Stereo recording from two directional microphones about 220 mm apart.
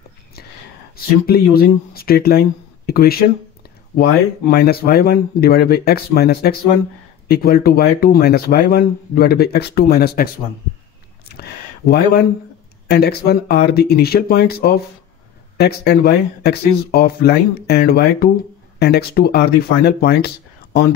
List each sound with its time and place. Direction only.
0.9 s speech: 45° left (ahead or behind)
11.2 s a sound: 45° left (ahead or behind)
12.8 s speech: 45° left (ahead or behind)